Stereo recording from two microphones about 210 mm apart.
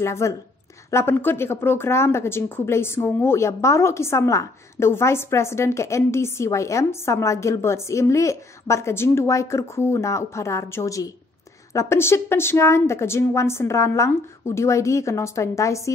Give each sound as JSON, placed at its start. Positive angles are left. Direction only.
{"t": 0.0, "sound": "speech", "side_deg": 15}